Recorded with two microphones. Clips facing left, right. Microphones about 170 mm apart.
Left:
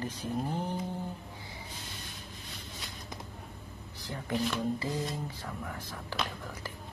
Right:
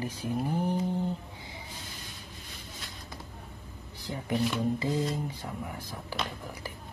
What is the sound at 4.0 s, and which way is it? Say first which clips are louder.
Speech: right 3 dB; 15° right (ahead or behind).